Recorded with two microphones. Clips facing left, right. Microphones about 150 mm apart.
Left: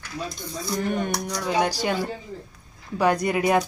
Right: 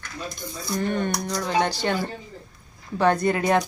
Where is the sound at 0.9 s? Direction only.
10° left (ahead or behind).